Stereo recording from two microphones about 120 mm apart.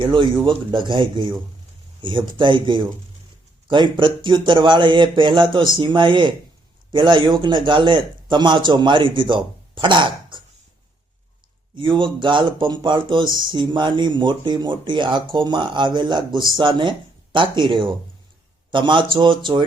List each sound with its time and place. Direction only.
0.0 s speech: 40° right (ahead or behind)
11.8 s speech: 40° right (ahead or behind)